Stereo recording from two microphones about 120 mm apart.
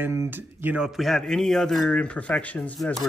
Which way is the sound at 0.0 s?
20° right (ahead or behind).